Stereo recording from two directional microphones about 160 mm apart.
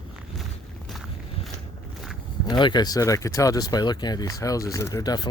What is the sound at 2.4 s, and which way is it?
Speech, 25° left (ahead or behind).